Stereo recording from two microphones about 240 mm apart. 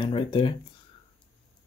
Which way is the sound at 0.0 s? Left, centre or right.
Left.